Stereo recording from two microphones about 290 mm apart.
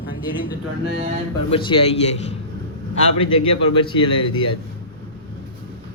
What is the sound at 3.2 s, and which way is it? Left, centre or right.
Speech, centre.